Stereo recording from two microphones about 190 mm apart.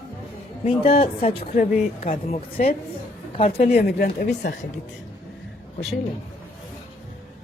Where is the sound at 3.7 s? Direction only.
55° left (ahead or behind).